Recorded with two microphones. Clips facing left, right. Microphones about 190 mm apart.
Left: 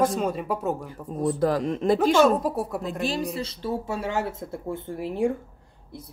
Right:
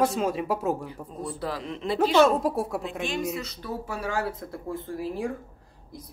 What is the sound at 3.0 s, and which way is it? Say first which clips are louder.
Speech: left 2 dB; 35° left (ahead or behind).